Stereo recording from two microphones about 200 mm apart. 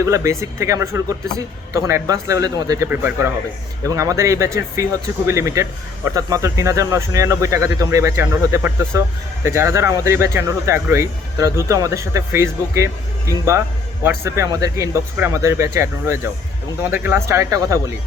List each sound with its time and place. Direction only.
0.0 s speech: 15° right (ahead or behind)